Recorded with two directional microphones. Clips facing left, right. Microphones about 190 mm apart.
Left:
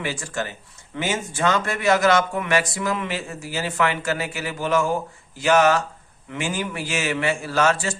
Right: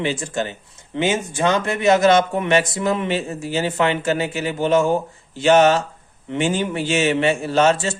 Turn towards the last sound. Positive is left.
turn(degrees=-25)  # may be behind; listen again after turning